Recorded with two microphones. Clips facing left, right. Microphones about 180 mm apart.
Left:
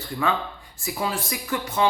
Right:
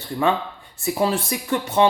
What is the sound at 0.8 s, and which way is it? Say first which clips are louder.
Speech: right 7 dB; 30° right (ahead or behind).